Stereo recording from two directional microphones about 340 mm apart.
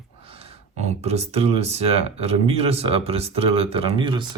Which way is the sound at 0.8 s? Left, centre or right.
Centre.